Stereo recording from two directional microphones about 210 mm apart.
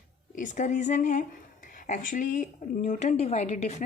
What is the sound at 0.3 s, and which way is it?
Speech, 35° left (ahead or behind).